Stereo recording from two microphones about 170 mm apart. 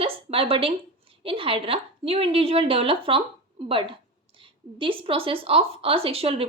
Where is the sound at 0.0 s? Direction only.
35° right (ahead or behind).